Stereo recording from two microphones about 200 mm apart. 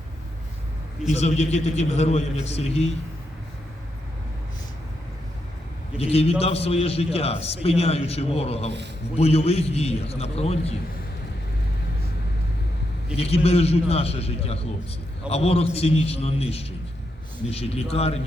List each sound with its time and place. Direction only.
1.1 s a man's voice: 35° left (ahead or behind)
6.0 s a man's voice: 30° left (ahead or behind)
13.1 s a man's voice: 30° left (ahead or behind)